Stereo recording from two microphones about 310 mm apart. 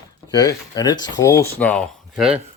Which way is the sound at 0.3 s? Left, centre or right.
Centre.